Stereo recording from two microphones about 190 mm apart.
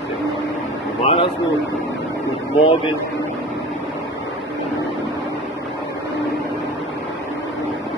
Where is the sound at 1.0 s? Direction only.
30° left (ahead or behind).